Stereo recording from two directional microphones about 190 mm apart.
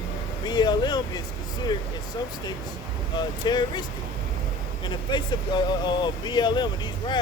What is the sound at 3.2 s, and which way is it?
Speech, 20° left (ahead or behind).